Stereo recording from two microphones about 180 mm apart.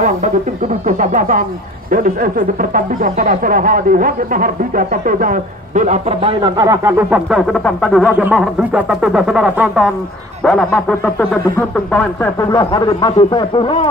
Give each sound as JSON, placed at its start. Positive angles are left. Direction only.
{"t": 0.8, "sound": "speech", "side_deg": -45}
{"t": 7.2, "sound": "speech", "side_deg": 0}
{"t": 8.1, "sound": "speech", "side_deg": -5}
{"t": 12.4, "sound": "speech", "side_deg": 20}